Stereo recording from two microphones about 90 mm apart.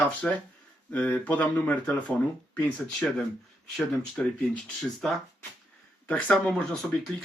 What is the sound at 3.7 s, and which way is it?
Speech, 10° left (ahead or behind).